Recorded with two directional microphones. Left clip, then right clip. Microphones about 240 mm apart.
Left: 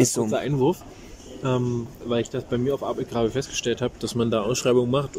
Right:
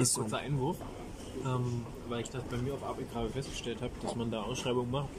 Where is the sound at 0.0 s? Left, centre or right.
Left.